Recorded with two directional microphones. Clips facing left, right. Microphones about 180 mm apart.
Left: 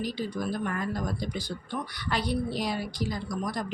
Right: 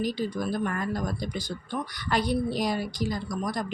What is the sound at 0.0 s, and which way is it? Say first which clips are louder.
Speech: right 3 dB; 45° right (ahead or behind).